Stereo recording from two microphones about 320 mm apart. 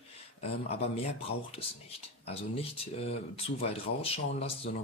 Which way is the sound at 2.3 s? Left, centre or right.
Centre.